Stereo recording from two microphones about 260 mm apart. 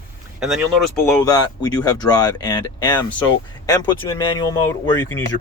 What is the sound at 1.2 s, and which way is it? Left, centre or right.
Speech, centre.